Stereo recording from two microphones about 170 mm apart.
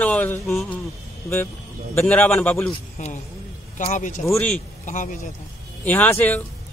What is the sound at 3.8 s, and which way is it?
Speech, 45° left (ahead or behind).